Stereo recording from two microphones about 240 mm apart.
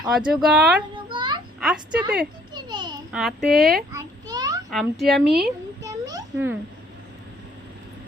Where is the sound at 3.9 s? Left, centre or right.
Centre.